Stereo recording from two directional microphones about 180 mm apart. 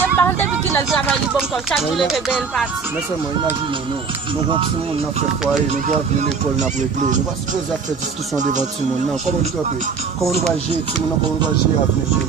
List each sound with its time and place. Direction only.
0.2 s vehicle: 10° left (ahead or behind)
0.9 s speech: centre (ahead or behind)
8.4 s speech: 40° right (ahead or behind)